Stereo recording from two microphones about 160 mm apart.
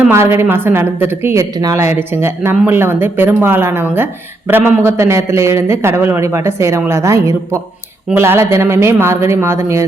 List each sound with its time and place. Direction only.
0.1 s a woman's voice: 15° right (ahead or behind)